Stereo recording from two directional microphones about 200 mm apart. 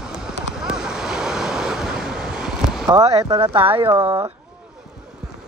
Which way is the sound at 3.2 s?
20° right (ahead or behind).